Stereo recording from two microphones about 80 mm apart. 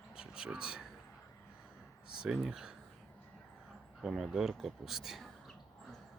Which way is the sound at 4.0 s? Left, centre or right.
Centre.